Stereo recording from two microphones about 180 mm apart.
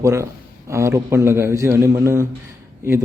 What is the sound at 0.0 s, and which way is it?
Speech, 15° right (ahead or behind).